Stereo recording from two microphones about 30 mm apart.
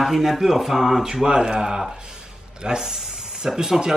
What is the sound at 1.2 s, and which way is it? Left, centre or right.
Speech, right.